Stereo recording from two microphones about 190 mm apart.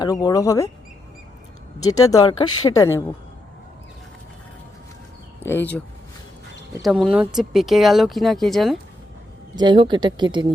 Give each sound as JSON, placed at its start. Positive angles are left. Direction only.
{"t": 0.0, "sound": "speech", "side_deg": 20}
{"t": 1.8, "sound": "speech", "side_deg": 20}
{"t": 5.4, "sound": "speech", "side_deg": 10}
{"t": 6.8, "sound": "speech", "side_deg": 0}
{"t": 9.6, "sound": "speech", "side_deg": -25}